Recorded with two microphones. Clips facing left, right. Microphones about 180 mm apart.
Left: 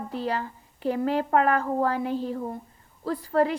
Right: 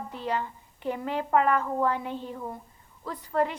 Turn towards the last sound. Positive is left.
turn(degrees=35)  # may be behind; listen again after turning